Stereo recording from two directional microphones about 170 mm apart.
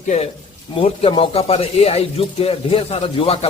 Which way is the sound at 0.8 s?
35° left (ahead or behind).